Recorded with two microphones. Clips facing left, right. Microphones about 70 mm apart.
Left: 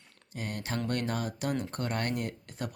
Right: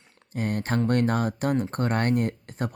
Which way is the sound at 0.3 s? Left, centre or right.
Right.